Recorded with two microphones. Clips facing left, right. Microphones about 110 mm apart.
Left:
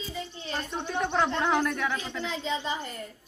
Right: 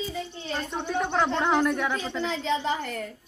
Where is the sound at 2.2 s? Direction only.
70° right (ahead or behind).